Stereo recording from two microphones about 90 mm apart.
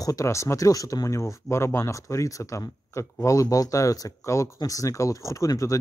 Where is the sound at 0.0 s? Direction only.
40° left (ahead or behind).